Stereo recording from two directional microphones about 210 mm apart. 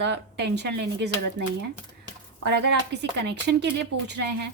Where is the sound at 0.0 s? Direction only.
55° right (ahead or behind).